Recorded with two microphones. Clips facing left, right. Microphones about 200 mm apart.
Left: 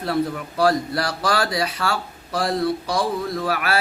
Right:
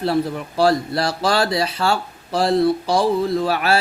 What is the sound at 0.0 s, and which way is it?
Speech, 30° right (ahead or behind).